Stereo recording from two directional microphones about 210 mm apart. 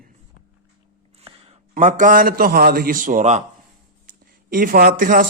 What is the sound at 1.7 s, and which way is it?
A man's voice, 35° right (ahead or behind).